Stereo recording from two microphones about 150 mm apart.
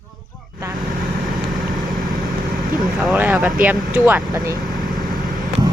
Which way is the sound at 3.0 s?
Centre (ahead or behind).